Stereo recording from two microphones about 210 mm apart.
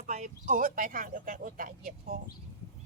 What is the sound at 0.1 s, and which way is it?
Speech, 35° right (ahead or behind).